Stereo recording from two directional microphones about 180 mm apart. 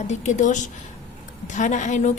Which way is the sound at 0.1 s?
40° left (ahead or behind).